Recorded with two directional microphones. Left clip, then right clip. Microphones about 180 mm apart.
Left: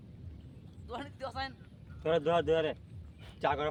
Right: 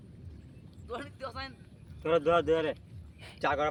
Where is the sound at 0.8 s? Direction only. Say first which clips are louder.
Right 1 dB; 20° left (ahead or behind).